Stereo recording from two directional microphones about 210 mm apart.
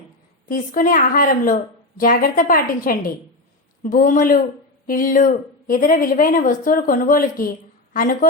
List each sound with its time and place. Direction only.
0.4 s a woman's voice: 40° left (ahead or behind)